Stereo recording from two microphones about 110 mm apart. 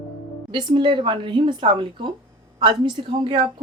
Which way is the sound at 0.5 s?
50° right (ahead or behind).